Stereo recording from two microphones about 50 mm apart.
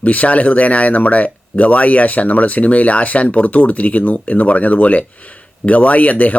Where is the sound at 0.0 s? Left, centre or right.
Left.